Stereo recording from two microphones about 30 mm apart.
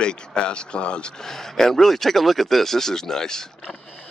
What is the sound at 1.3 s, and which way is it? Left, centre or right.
Speech, centre.